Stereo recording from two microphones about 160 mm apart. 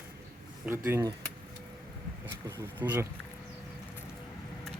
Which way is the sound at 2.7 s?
10° right (ahead or behind).